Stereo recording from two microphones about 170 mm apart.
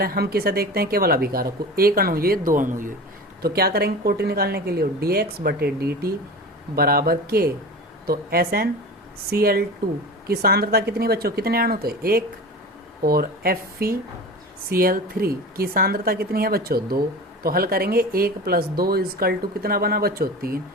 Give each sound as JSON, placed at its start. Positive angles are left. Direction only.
{"t": 0.0, "sound": "speech", "side_deg": -65}
{"t": 3.4, "sound": "speech", "side_deg": -65}